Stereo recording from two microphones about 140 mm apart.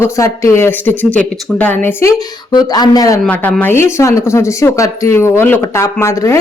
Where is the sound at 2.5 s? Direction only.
30° left (ahead or behind).